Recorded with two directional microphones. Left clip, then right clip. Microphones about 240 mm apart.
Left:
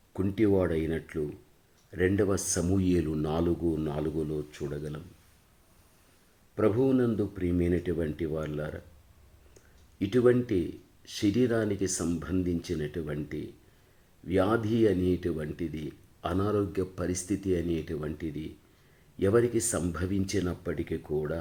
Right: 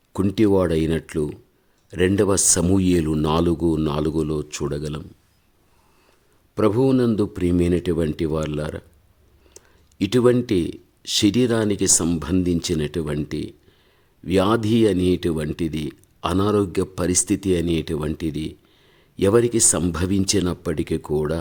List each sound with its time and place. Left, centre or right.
0.1 s speech: right
6.6 s speech: right